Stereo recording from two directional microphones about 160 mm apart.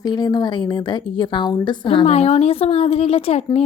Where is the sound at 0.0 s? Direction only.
25° left (ahead or behind).